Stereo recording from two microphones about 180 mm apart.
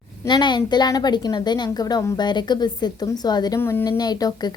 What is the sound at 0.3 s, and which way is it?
A woman's voice, 25° left (ahead or behind).